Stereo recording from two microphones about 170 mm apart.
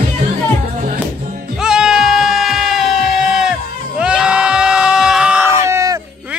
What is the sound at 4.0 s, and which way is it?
Sheep, 5° right (ahead or behind).